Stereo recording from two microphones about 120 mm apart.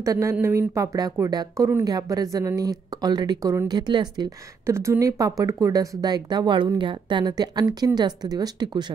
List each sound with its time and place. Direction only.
0.0 s speech: 25° right (ahead or behind)
4.6 s speech: 25° right (ahead or behind)